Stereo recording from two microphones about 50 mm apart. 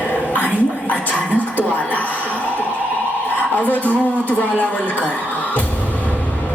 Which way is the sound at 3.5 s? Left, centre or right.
Left.